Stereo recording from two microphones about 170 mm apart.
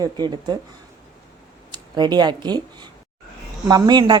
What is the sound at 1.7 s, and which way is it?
Speech, 25° right (ahead or behind).